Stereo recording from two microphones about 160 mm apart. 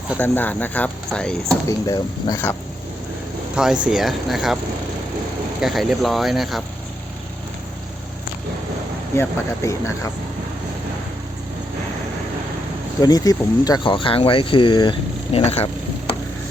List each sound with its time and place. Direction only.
0.2 s speech: 10° left (ahead or behind)
1.6 s speech: 20° left (ahead or behind)
3.5 s speech: 5° right (ahead or behind)
5.5 s speech: centre (ahead or behind)
9.1 s speech: 20° left (ahead or behind)
13.0 s speech: 25° left (ahead or behind); by 15.7 s 40° left (ahead or behind)